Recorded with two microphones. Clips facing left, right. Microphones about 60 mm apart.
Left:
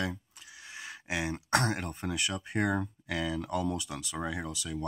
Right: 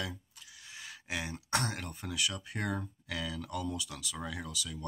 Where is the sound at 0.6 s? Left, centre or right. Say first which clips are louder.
Left 5 dB; left.